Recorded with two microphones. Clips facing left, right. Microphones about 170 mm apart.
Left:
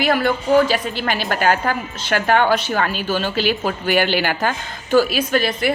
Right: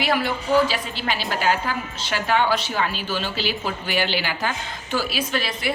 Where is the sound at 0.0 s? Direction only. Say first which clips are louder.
Left 5 dB; 50° left (ahead or behind).